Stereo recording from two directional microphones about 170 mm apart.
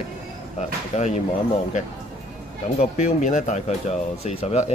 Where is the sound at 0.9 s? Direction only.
45° left (ahead or behind).